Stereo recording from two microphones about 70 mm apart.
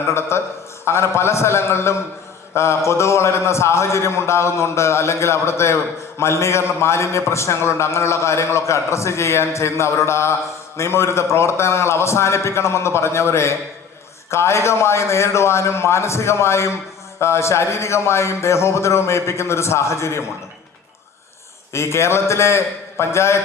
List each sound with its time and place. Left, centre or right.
0.1 s a man's voice: left
21.7 s a man's voice: left